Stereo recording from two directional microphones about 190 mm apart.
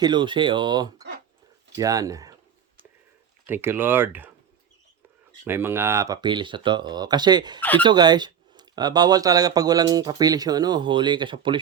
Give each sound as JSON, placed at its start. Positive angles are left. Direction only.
{"t": 0.0, "sound": "speech", "side_deg": -25}
{"t": 3.4, "sound": "speech", "side_deg": -10}
{"t": 5.5, "sound": "speech", "side_deg": -10}
{"t": 7.6, "sound": "speech", "side_deg": 10}
{"t": 7.9, "sound": "speech", "side_deg": -20}